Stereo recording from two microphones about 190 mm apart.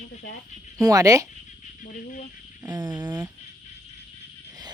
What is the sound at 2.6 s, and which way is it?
Speech, 20° right (ahead or behind).